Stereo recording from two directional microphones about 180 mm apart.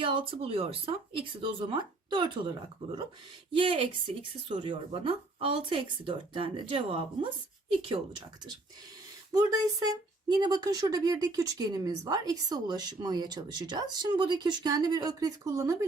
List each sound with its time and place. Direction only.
0.0 s speech: 30° right (ahead or behind)
3.5 s speech: 30° right (ahead or behind)
9.3 s speech: 20° right (ahead or behind)